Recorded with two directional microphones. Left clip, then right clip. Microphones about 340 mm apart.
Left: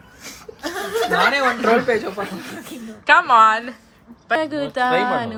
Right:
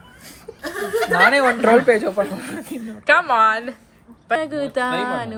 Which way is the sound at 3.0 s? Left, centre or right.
Centre.